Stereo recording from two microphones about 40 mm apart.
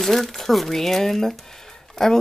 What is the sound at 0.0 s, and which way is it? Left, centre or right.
Speech, centre.